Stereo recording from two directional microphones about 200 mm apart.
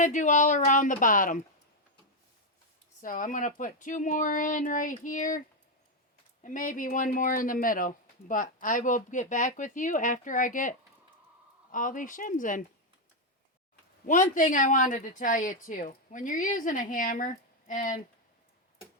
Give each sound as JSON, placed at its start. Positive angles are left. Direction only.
{"t": 0.0, "sound": "speech", "side_deg": 40}
{"t": 3.0, "sound": "speech", "side_deg": 40}
{"t": 6.4, "sound": "speech", "side_deg": 40}
{"t": 14.1, "sound": "speech", "side_deg": 40}